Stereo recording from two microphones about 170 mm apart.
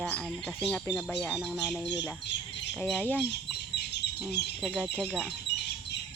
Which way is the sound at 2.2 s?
90° left.